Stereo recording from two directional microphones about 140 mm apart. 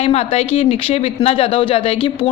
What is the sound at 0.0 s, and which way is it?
A woman's voice, 50° left (ahead or behind).